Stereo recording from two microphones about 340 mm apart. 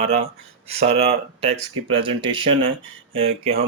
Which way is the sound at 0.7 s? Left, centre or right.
Centre.